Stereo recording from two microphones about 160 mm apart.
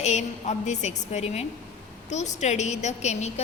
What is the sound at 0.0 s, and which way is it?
A woman's voice, 45° left (ahead or behind).